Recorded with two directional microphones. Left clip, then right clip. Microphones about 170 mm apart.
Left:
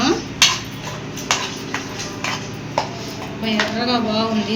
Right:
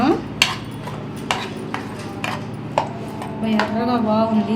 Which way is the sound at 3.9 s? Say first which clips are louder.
Right 1 dB; 45° right (ahead or behind).